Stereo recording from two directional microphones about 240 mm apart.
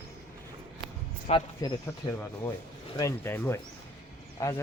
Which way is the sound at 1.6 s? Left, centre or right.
Centre.